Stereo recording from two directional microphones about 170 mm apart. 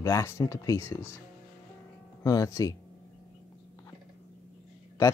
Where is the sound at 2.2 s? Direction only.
20° left (ahead or behind).